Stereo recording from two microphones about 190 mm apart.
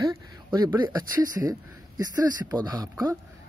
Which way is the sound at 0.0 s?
20° right (ahead or behind).